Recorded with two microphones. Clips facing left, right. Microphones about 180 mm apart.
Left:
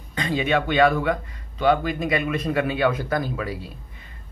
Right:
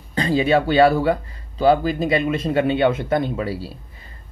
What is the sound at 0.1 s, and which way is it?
Speech, 35° right (ahead or behind).